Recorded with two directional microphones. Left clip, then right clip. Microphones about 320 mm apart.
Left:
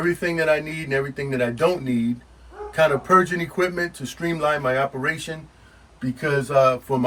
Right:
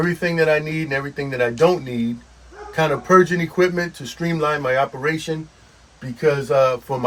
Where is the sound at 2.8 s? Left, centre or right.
Centre.